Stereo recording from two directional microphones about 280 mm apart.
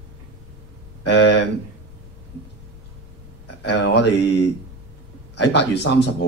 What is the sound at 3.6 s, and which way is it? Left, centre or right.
Speech, left.